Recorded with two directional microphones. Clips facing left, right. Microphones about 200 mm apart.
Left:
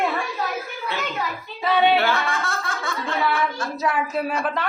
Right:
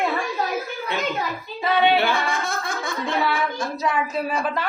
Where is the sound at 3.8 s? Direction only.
5° left (ahead or behind).